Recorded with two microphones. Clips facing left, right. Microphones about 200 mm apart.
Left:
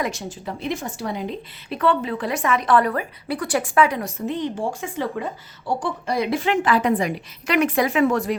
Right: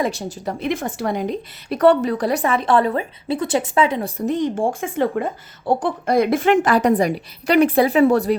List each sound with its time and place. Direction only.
0.0 s a woman's voice: 35° right (ahead or behind)
0.6 s a woman's voice: 55° right (ahead or behind); by 4.1 s 25° right (ahead or behind)
4.3 s speech: 45° right (ahead or behind)